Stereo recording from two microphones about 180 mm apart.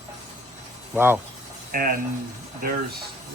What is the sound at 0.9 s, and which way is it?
Speech, 10° right (ahead or behind).